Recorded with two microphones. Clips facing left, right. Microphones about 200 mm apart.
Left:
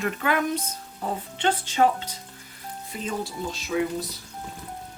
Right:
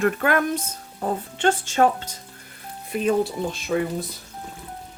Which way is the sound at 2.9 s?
60° right (ahead or behind).